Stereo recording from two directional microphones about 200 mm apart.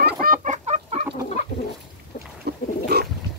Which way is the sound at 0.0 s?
45° right (ahead or behind).